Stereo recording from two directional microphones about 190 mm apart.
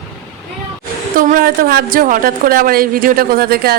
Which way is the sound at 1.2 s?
45° right (ahead or behind).